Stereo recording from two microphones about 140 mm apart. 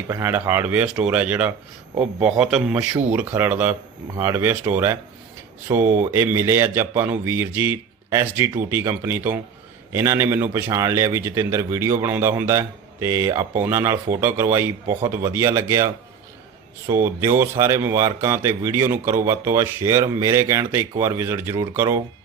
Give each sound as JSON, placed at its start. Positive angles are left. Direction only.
{"t": 0.1, "sound": "a man's voice", "side_deg": -15}
{"t": 16.9, "sound": "speech", "side_deg": -20}